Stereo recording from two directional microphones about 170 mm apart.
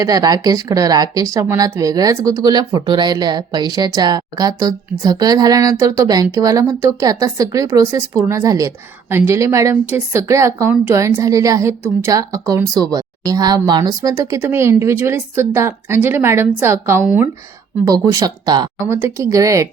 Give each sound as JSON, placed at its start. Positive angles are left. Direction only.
{"t": 0.0, "sound": "speech", "side_deg": -20}